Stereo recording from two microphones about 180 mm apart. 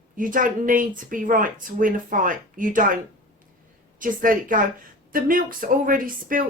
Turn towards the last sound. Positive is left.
turn(degrees=-50)  # may be behind; listen again after turning